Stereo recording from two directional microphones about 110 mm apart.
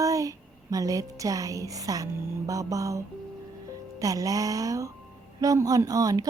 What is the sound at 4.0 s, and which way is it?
A woman's voice, 30° right (ahead or behind).